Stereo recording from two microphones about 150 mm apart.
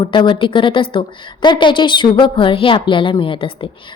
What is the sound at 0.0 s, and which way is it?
A woman's voice, 35° left (ahead or behind).